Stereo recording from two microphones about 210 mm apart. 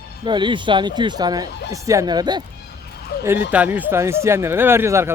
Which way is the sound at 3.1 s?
45° left (ahead or behind).